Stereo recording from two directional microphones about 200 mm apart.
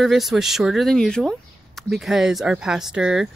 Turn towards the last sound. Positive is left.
turn(degrees=-5)  # may be behind; listen again after turning